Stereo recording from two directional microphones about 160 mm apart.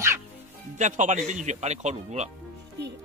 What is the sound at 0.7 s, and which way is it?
Speech, 50° right (ahead or behind).